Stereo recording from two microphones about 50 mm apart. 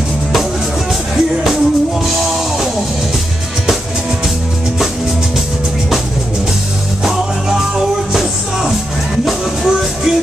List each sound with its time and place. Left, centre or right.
1.1 s music: centre
7.1 s music: centre